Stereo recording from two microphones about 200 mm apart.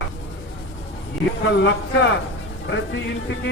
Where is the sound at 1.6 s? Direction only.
65° left (ahead or behind).